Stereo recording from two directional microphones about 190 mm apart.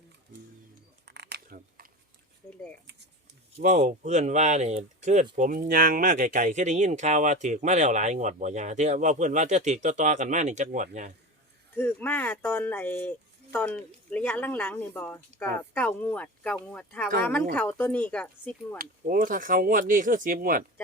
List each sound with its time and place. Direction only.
1.0 s a sound: 60° right (ahead or behind)
3.6 s speech: 40° right (ahead or behind)
11.7 s speech: 10° left (ahead or behind)
18.8 s speech: 45° right (ahead or behind)